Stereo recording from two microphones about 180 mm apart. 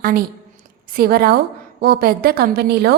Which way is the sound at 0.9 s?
55° right (ahead or behind).